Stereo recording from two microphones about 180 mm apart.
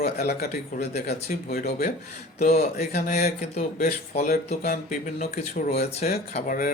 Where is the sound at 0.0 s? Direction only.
60° left (ahead or behind).